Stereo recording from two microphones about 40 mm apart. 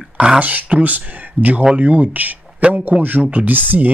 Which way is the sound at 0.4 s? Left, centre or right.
Right.